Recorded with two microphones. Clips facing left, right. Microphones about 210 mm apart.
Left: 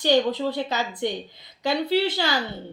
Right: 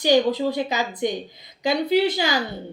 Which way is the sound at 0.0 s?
10° right (ahead or behind).